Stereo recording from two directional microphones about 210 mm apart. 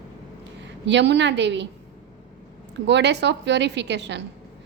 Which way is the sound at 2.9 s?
55° right (ahead or behind).